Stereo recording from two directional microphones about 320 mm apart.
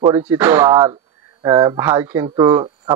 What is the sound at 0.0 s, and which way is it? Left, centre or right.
Speech, centre.